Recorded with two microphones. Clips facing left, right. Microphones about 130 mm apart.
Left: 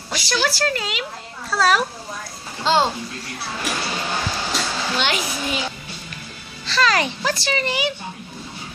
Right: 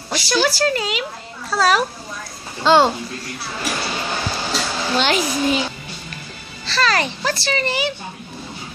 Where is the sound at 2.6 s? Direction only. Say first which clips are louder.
Right 5 dB; 60° right (ahead or behind).